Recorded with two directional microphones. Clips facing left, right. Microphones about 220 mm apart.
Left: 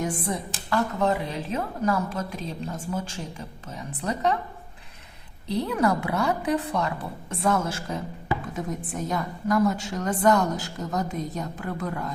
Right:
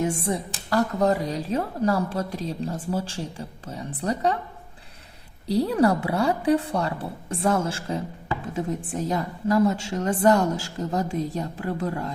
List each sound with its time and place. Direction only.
0.0 s speech: 25° right (ahead or behind)
0.7 s a woman's voice: 40° right (ahead or behind)
5.5 s a woman's voice: 35° right (ahead or behind)